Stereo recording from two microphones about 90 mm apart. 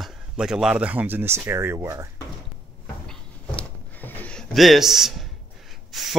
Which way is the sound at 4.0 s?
15° left (ahead or behind).